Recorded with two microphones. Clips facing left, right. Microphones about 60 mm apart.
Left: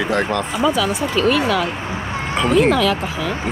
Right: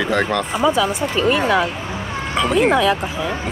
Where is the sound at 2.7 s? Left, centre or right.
Right.